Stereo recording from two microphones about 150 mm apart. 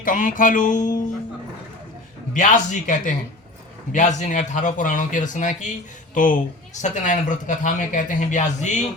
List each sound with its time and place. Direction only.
0.0 s speech: 60° left (ahead or behind)
2.3 s speech: 60° left (ahead or behind)